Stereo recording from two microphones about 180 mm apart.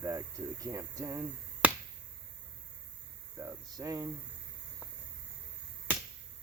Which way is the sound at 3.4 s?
20° right (ahead or behind).